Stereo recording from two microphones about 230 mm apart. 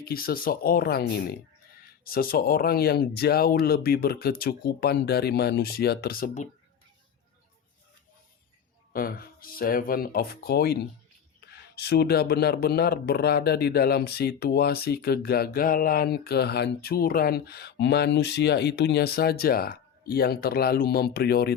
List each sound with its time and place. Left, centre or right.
0.0 s speech: left
8.9 s speech: left